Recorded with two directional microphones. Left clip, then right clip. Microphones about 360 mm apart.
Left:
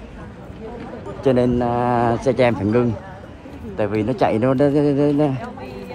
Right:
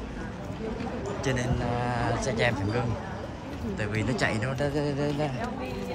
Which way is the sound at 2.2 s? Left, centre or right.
Centre.